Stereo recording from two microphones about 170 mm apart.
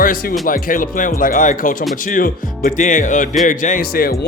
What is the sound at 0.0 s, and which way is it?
Speech, 60° left (ahead or behind).